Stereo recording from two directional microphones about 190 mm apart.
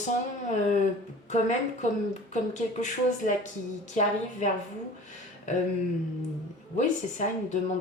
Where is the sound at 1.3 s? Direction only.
40° left (ahead or behind).